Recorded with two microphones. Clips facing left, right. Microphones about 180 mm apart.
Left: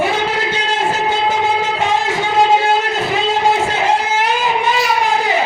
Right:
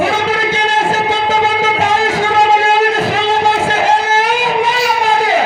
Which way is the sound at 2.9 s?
90° right.